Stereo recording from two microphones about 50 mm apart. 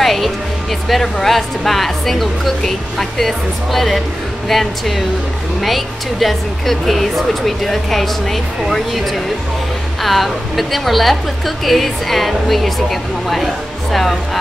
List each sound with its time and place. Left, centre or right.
0.0 s speech: centre